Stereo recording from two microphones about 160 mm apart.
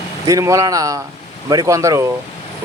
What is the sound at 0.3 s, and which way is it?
Speech, 20° right (ahead or behind).